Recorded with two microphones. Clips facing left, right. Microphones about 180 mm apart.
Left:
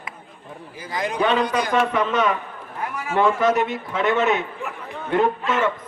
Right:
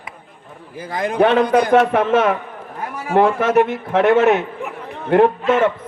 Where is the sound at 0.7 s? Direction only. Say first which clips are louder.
Right 6 dB; 55° right (ahead or behind).